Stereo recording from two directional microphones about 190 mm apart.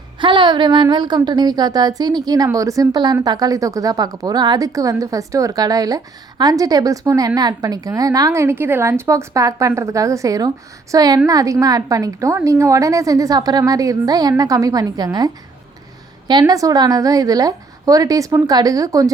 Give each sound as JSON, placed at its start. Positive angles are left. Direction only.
{"t": 0.2, "sound": "speech", "side_deg": -25}